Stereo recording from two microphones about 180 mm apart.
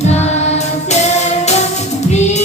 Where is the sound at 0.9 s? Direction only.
40° left (ahead or behind).